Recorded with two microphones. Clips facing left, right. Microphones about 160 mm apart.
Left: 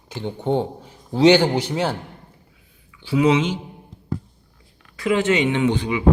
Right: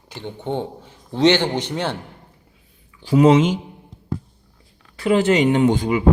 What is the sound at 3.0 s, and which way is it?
Speech, 45° right (ahead or behind).